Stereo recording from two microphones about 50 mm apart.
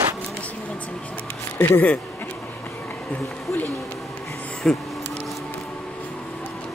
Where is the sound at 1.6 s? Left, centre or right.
Left.